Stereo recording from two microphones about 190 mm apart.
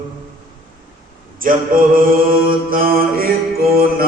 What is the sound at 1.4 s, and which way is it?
Mantra, 45° right (ahead or behind).